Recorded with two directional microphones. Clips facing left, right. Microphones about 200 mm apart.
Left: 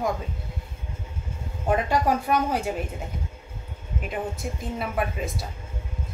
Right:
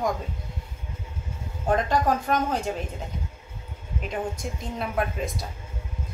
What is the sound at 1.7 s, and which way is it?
A woman's voice, 10° left (ahead or behind).